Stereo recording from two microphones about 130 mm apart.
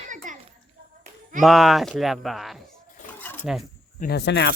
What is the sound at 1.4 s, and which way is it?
Speech, centre (ahead or behind).